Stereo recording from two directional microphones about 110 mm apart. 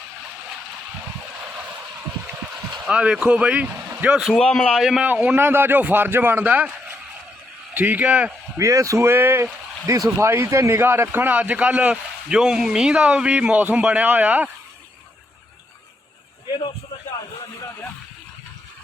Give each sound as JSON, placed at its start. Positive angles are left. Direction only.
{"t": 2.7, "sound": "a man's voice", "side_deg": -5}
{"t": 8.5, "sound": "a man's voice", "side_deg": -30}